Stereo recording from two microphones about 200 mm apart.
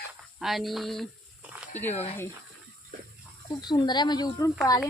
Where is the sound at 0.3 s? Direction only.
Centre (ahead or behind).